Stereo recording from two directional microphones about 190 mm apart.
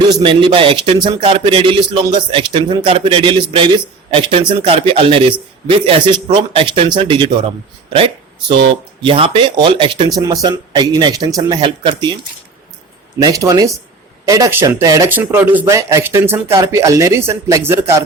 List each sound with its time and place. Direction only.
0.2 s speech: 30° right (ahead or behind)
13.1 s speech: 20° right (ahead or behind)